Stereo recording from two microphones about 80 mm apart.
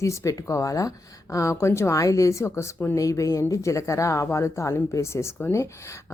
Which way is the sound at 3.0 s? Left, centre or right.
Left.